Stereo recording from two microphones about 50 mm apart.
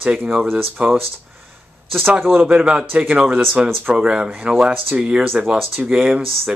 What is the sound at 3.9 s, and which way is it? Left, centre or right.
Speech, centre.